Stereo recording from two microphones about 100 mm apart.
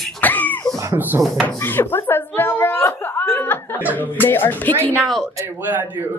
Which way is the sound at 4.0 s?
20° left (ahead or behind).